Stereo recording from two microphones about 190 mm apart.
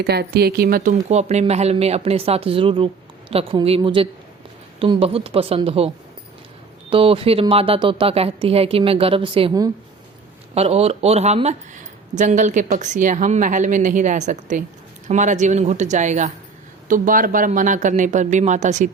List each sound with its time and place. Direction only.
0.0 s speech: 55° right (ahead or behind)
1.0 s speech: 35° right (ahead or behind)
6.9 s a woman's voice: 30° right (ahead or behind)
10.5 s speech: 35° right (ahead or behind)